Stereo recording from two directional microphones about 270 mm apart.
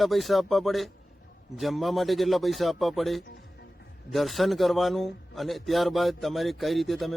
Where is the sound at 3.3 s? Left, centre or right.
Left.